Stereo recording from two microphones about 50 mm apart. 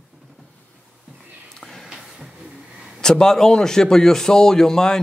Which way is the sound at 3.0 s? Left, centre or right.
Centre.